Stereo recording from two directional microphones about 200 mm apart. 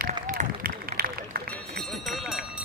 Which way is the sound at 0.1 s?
45° right (ahead or behind).